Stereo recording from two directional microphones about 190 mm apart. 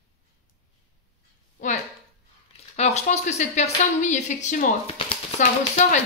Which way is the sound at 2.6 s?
35° left (ahead or behind).